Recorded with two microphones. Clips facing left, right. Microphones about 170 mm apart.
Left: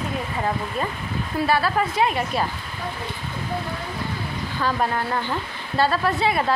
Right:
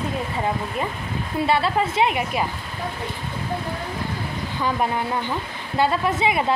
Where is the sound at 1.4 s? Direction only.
25° right (ahead or behind).